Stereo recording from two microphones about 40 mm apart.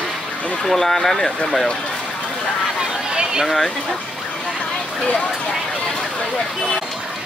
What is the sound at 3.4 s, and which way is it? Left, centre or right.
Speech, centre.